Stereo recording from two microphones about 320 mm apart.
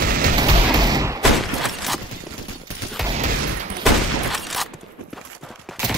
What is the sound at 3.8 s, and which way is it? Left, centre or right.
Fusillade, centre.